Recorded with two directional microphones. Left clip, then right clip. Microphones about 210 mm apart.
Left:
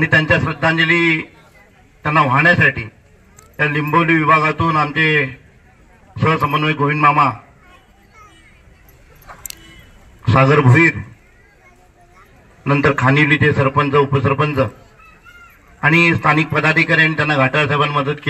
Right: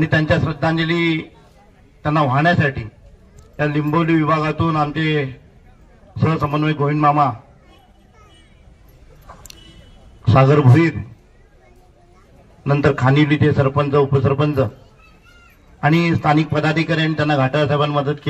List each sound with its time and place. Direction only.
0.1 s a man's voice: 40° right (ahead or behind)
10.2 s a man's voice: 45° right (ahead or behind)
12.7 s a man's voice: 45° right (ahead or behind)
15.8 s a man's voice: 45° right (ahead or behind)